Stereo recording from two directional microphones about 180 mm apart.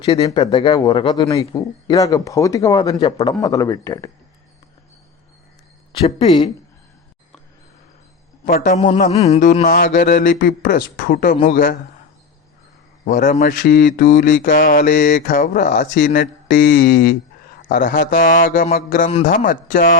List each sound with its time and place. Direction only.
0.0 s speech: 25° left (ahead or behind)
5.9 s speech: 30° left (ahead or behind)
8.4 s speech: 55° left (ahead or behind)
8.7 s mantra: 40° left (ahead or behind)
13.1 s mantra: 45° left (ahead or behind)
17.7 s speech: 60° left (ahead or behind)
18.1 s mantra: 50° left (ahead or behind)